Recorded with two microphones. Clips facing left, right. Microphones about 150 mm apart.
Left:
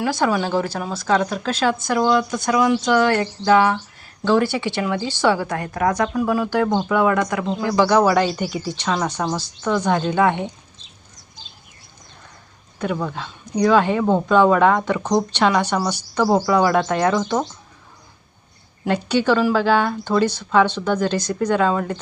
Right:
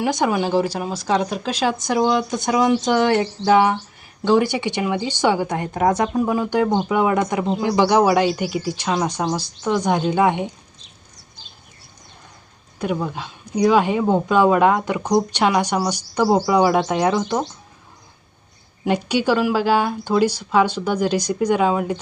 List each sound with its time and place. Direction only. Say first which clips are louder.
0.0 s speech: even; 20° right (ahead or behind)
12.8 s speech: right 1 dB; 15° right (ahead or behind)
18.9 s speech: even; 10° right (ahead or behind)